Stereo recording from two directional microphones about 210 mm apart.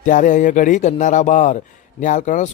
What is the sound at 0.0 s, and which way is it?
Speech, 40° left (ahead or behind).